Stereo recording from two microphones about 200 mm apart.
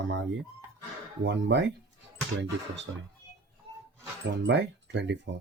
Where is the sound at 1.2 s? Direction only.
60° right (ahead or behind).